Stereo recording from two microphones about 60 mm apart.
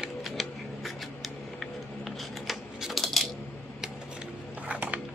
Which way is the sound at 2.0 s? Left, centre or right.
Centre.